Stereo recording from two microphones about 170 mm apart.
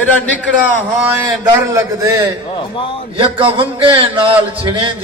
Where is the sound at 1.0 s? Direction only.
10° right (ahead or behind).